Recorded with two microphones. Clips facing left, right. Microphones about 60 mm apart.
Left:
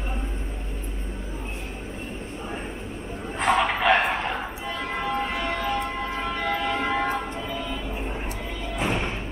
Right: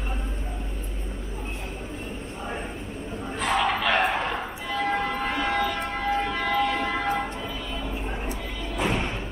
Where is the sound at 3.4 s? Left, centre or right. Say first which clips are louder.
Left 2 dB; centre.